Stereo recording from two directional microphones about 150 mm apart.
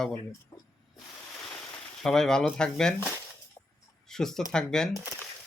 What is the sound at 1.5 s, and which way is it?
Speech, 5° left (ahead or behind).